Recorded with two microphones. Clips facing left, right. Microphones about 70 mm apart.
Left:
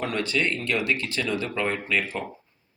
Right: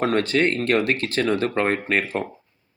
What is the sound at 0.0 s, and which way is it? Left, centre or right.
Speech, right.